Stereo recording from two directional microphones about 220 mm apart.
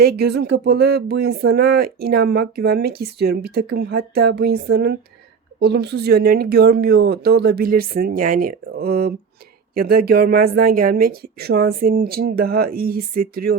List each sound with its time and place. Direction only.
0.0 s speech: 45° right (ahead or behind)